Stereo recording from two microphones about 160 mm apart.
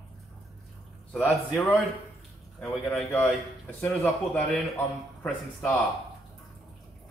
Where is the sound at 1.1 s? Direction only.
5° left (ahead or behind).